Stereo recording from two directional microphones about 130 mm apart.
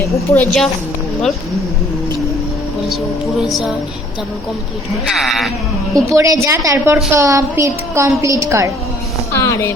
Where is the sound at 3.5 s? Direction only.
Centre (ahead or behind).